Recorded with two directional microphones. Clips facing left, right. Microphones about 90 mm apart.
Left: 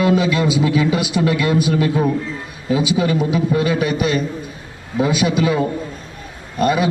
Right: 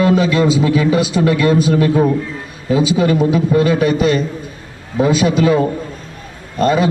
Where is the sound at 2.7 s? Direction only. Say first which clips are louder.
Right 4 dB; 40° right (ahead or behind).